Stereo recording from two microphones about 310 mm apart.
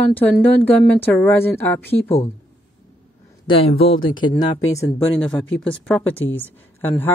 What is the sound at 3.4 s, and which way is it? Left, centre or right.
Speech, centre.